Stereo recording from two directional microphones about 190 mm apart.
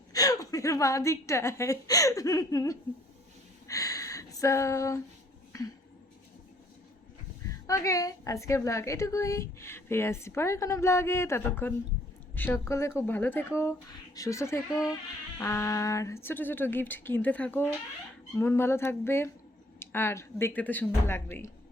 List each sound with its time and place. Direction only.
0.1 s a woman's voice: 20° left (ahead or behind)
3.7 s a sound: 20° left (ahead or behind)
7.7 s a woman's voice: 15° left (ahead or behind)